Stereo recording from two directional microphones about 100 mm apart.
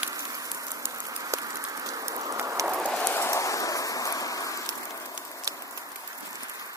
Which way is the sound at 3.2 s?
30° left (ahead or behind).